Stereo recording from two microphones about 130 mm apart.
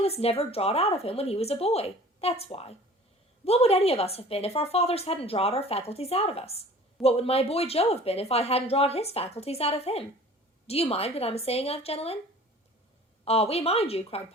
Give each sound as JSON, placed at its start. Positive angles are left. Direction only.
{"t": 0.0, "sound": "a woman's voice", "side_deg": 50}
{"t": 13.2, "sound": "a woman's voice", "side_deg": 50}